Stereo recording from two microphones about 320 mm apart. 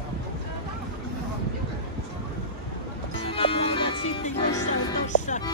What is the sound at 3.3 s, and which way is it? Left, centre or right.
Music, centre.